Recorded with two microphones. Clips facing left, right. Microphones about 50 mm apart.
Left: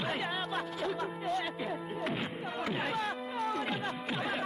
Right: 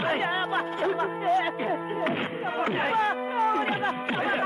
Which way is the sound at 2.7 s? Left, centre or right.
Right.